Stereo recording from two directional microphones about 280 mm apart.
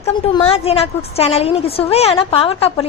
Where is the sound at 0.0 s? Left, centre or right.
Centre.